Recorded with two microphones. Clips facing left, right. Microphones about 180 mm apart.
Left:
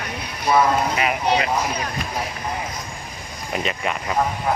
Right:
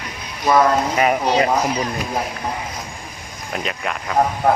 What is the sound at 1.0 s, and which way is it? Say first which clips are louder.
Speech: right 4 dB; 40° right (ahead or behind).